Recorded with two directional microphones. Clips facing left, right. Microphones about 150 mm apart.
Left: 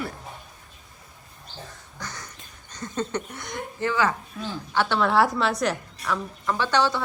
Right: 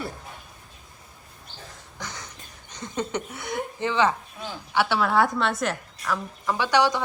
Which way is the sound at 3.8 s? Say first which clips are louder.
Right 1 dB; 20° right (ahead or behind).